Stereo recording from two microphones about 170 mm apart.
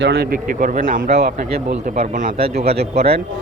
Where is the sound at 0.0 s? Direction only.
75° right (ahead or behind); by 2.3 s 45° right (ahead or behind).